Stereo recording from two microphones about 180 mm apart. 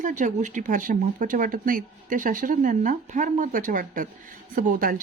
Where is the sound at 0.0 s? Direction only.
45° right (ahead or behind).